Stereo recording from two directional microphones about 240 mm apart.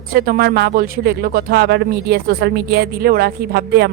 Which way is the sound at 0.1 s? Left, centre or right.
Right.